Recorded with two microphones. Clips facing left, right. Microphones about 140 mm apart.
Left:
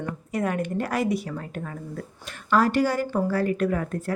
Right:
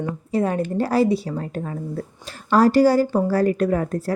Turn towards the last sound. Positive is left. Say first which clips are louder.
# right 4 dB
turn(degrees=-35)  # may be behind; listen again after turning